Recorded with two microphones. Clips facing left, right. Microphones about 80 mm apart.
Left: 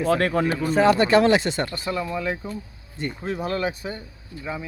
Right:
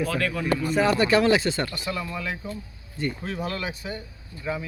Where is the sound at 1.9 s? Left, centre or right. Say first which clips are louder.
Left 4 dB; left.